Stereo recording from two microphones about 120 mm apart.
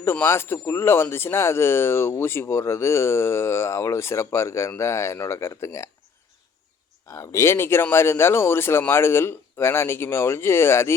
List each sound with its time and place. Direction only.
0.0 s speech: 20° left (ahead or behind)
7.1 s speech: 25° left (ahead or behind)